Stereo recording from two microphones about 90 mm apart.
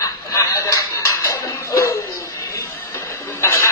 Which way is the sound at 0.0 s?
40° left (ahead or behind).